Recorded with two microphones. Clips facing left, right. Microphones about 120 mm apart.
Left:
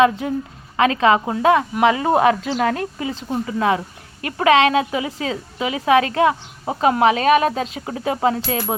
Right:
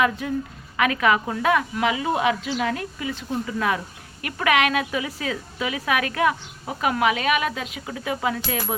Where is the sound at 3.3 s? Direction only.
25° left (ahead or behind).